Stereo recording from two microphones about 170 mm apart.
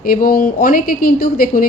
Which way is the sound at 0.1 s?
55° left (ahead or behind).